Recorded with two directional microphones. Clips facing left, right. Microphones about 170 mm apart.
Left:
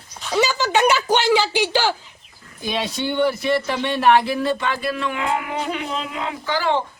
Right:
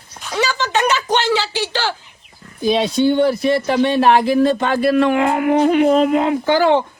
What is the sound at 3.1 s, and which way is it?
Speech, 40° right (ahead or behind).